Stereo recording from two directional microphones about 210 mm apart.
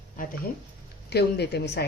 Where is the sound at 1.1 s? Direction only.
50° left (ahead or behind).